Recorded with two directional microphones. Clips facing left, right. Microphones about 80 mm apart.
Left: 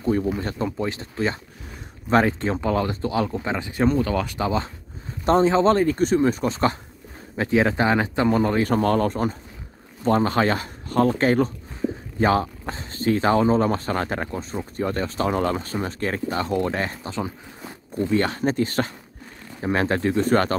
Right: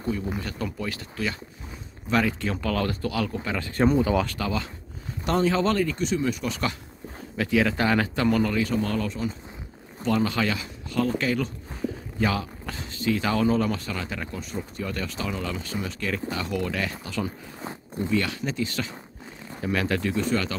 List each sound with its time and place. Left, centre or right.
0.4 s speech: left
3.8 s speech: centre
4.3 s speech: left
8.5 s speech: left
19.6 s speech: left